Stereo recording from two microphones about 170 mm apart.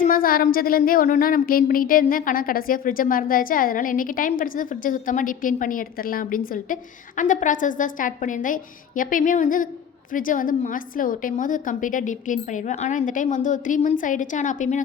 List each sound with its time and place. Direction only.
0.0 s a woman's voice: 55° left (ahead or behind)